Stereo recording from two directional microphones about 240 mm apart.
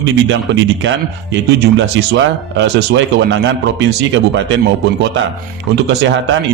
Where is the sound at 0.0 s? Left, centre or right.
Right.